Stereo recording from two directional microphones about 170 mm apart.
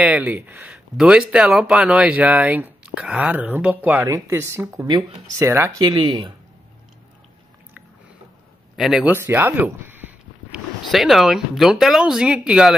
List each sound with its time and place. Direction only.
0.0 s speech: 10° right (ahead or behind)
5.9 s speech: 25° right (ahead or behind)
8.7 s speech: 5° right (ahead or behind)